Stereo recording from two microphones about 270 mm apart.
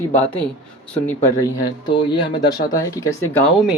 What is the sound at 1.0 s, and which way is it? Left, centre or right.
Speech, centre.